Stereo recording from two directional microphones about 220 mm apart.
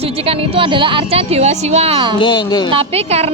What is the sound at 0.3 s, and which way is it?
Speech, 25° right (ahead or behind).